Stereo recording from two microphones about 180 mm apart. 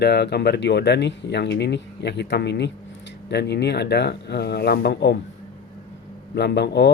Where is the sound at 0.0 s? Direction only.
65° left (ahead or behind).